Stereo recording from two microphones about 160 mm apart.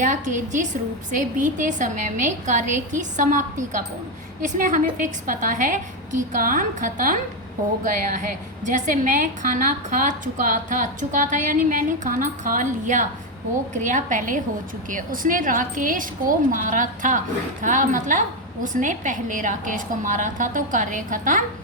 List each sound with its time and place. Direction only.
0.0 s a woman's voice: 50° right (ahead or behind)